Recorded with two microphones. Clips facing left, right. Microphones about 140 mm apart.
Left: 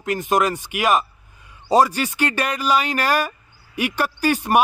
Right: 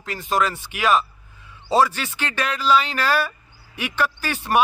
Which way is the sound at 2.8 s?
45° left (ahead or behind).